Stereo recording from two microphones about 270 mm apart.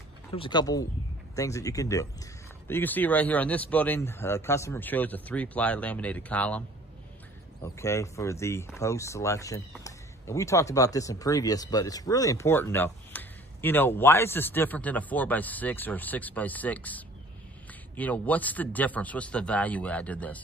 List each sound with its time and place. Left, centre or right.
0.3 s speech: centre
7.6 s speech: centre